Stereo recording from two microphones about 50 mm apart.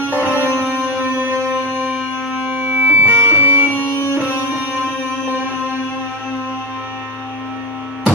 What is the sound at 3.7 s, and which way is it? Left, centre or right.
Music, left.